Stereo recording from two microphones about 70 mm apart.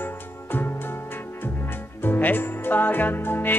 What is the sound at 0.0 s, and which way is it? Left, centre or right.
Music, left.